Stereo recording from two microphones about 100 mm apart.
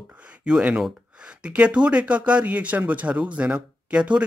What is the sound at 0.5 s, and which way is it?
Speech, 10° right (ahead or behind).